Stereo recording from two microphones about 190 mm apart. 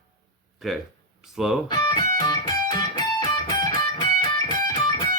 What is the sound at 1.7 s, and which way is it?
Music, 20° left (ahead or behind).